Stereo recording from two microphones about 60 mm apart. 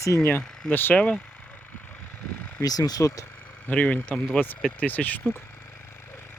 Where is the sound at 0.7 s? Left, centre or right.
Left.